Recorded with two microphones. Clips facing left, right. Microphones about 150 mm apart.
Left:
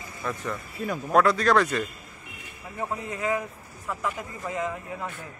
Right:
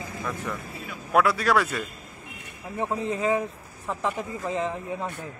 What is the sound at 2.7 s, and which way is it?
Speech, 25° right (ahead or behind).